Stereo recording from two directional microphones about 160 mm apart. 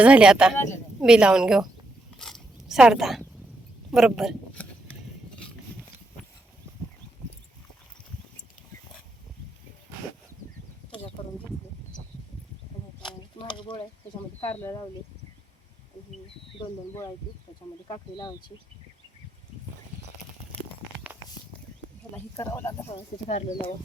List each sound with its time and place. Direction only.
0.0 s a woman's voice: 5° right (ahead or behind)
2.1 s zipper: centre (ahead or behind)
3.9 s a woman's voice: centre (ahead or behind)
13.5 s mechanisms: 30° left (ahead or behind)
17.8 s speech: 30° left (ahead or behind)
22.1 s speech: 15° left (ahead or behind)
23.0 s speech: 35° left (ahead or behind)